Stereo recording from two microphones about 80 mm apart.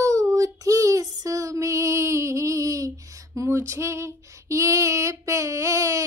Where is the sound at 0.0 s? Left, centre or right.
Right.